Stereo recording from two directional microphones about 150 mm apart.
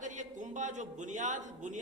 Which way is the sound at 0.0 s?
55° right (ahead or behind).